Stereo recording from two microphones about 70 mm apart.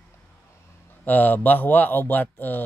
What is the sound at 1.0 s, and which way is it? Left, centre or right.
Speech, left.